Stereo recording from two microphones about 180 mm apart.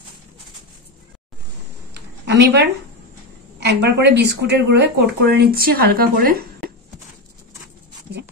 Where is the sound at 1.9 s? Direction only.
70° right (ahead or behind).